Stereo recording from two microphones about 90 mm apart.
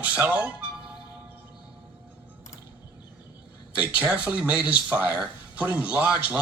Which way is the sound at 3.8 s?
15° right (ahead or behind).